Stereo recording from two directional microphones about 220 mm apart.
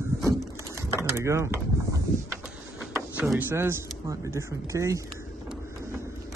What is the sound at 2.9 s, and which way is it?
Speech, 5° right (ahead or behind).